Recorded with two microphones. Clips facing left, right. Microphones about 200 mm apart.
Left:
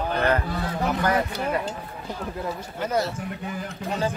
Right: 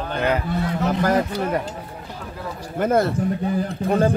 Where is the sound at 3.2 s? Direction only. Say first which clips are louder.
Right 10 dB; 35° right (ahead or behind).